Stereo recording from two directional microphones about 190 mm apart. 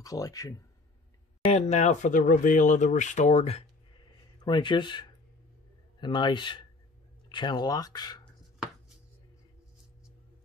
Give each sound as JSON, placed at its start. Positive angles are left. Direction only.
{"t": 0.0, "sound": "speech", "side_deg": 20}
{"t": 1.4, "sound": "speech", "side_deg": 35}
{"t": 4.5, "sound": "speech", "side_deg": 25}